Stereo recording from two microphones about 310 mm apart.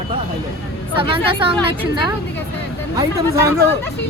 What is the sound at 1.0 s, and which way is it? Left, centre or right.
Speech, centre.